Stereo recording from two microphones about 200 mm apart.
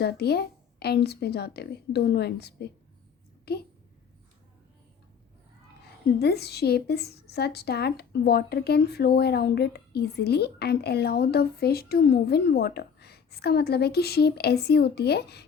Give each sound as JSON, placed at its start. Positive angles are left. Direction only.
{"t": 0.0, "sound": "a woman's voice", "side_deg": 55}
{"t": 6.1, "sound": "a woman's voice", "side_deg": 55}